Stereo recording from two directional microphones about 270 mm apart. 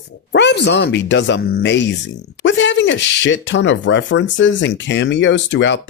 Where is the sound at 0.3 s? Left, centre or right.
Left.